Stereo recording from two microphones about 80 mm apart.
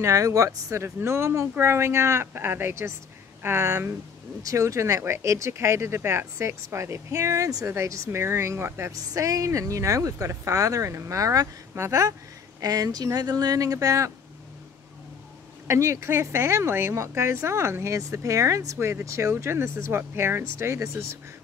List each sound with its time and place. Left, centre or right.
0.0 s speech: right
8.9 s speech: right
15.6 s speech: right